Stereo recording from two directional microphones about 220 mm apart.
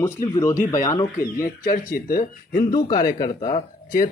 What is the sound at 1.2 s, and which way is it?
Speech, 40° left (ahead or behind).